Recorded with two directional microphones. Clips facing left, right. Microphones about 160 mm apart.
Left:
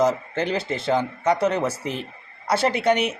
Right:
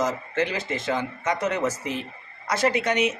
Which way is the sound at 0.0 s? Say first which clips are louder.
Left 4 dB; 30° left (ahead or behind).